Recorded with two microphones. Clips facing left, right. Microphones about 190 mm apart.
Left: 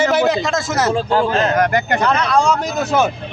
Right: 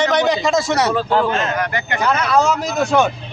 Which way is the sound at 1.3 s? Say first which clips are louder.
Left 4 dB; 35° left (ahead or behind).